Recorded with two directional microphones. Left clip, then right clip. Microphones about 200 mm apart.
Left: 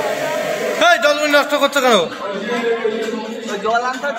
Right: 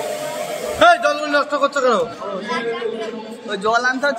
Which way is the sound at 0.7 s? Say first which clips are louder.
Even; 45° left (ahead or behind).